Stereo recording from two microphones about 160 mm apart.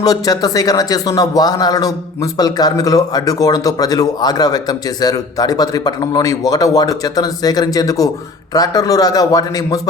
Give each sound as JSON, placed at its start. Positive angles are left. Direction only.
{"t": 0.0, "sound": "a man's voice", "side_deg": 25}